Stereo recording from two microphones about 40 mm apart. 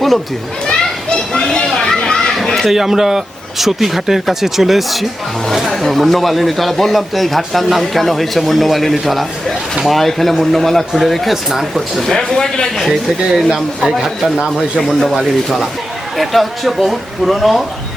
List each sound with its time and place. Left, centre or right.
0.7 s children playing: centre
2.6 s speech: centre
12.0 s a man's voice: centre
12.9 s speech: centre
16.1 s speech: centre